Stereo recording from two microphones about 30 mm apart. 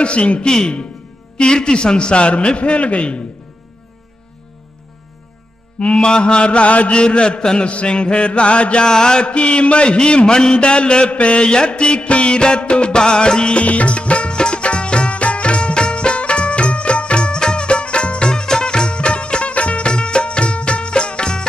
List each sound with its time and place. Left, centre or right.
0.0 s music: left
1.4 s music: left
5.9 s music: left
7.0 s music: left
8.8 s mantra: left
9.3 s music: left
10.6 s music: left
13.6 s music: left